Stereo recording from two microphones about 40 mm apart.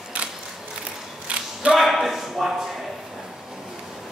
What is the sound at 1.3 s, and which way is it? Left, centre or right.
Single-lens reflex camera, right.